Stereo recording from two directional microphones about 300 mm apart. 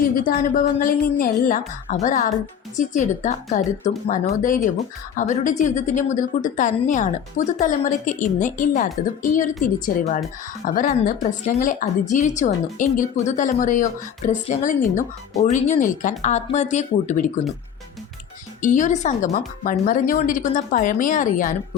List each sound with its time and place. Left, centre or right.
0.2 s speech: left
18.6 s speech: left